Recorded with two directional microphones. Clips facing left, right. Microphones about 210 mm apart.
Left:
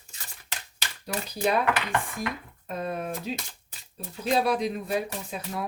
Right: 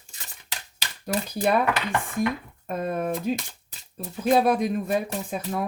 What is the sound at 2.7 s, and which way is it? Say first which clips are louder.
Speech: right 5 dB; 50° right (ahead or behind).